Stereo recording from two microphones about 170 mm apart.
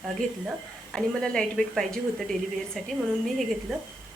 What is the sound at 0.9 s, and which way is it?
A woman's voice, 5° left (ahead or behind).